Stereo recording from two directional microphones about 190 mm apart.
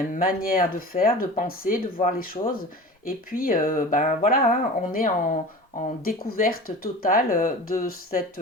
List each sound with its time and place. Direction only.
0.1 s speech: 50° left (ahead or behind)